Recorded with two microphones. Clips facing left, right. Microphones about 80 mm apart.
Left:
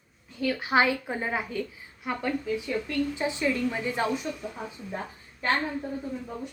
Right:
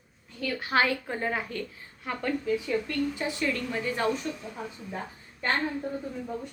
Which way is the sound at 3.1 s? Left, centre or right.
Left.